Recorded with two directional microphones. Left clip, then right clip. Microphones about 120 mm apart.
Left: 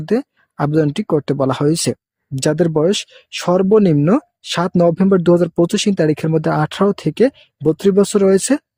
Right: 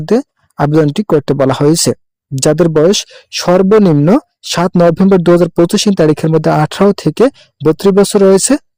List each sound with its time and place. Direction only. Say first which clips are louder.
0.0 s speech: right 6 dB; 50° right (ahead or behind)